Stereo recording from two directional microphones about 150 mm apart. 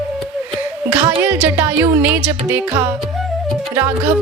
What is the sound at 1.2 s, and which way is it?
Music, 10° right (ahead or behind).